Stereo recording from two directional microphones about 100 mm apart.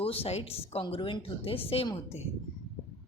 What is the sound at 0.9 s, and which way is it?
Speech, 60° left (ahead or behind).